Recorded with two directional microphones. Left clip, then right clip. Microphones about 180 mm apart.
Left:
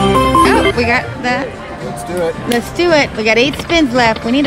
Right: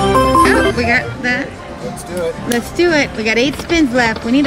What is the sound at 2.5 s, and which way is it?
Speech, 10° left (ahead or behind).